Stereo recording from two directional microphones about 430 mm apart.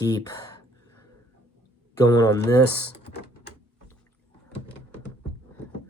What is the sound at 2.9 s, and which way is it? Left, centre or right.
Typing, left.